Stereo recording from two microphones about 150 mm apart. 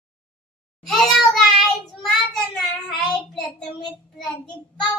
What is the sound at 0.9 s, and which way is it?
Child singing, 5° left (ahead or behind).